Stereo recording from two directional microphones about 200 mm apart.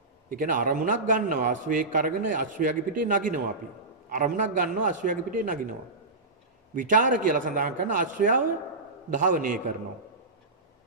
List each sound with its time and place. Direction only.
0.3 s a man's voice: 40° right (ahead or behind)
6.7 s a man's voice: 40° right (ahead or behind)